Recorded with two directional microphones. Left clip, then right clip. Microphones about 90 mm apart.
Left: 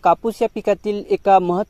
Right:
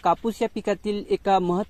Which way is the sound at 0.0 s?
20° left (ahead or behind).